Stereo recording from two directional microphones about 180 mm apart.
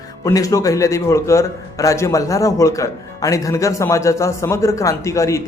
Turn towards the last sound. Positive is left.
turn(degrees=15)  # may be behind; listen again after turning